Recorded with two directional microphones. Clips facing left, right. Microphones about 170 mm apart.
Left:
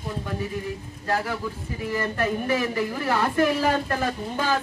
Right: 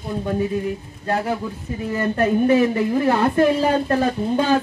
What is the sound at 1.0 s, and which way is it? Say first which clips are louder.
Speech: right 4 dB; 25° right (ahead or behind).